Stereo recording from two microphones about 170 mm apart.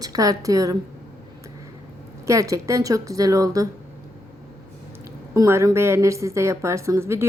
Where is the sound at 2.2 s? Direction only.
20° right (ahead or behind).